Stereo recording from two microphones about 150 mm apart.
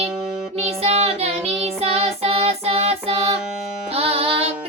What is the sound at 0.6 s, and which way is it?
Child singing, 45° right (ahead or behind).